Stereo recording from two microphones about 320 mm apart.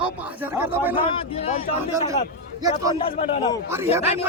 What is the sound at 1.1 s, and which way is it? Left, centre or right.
Speech, centre.